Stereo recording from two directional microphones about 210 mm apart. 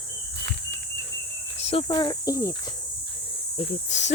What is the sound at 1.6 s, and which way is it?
Cricket, 25° left (ahead or behind).